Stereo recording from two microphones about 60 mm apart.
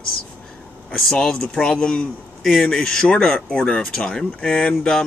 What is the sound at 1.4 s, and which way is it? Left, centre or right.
Speech, centre.